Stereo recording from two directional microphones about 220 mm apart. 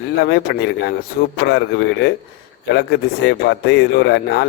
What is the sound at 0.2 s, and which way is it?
Speech, 55° left (ahead or behind).